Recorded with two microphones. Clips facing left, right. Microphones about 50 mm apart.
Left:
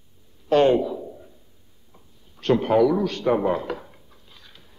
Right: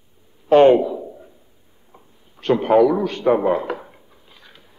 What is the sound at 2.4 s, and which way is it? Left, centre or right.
A man's voice, centre.